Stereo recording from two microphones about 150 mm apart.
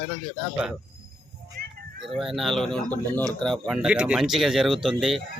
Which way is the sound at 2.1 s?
Centre (ahead or behind).